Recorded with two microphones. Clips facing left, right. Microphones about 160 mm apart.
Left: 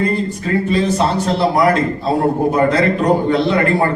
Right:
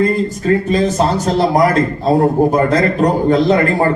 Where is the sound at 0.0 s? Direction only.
40° right (ahead or behind).